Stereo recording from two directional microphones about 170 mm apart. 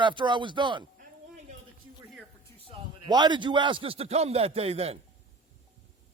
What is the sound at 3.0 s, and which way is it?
A man's voice, 25° right (ahead or behind).